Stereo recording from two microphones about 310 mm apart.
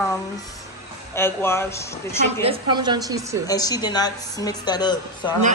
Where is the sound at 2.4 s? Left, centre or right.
Centre.